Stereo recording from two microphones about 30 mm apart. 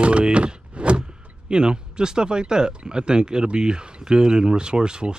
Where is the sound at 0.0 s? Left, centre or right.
Right.